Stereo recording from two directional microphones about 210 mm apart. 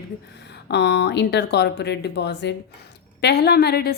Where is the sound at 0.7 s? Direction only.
55° left (ahead or behind).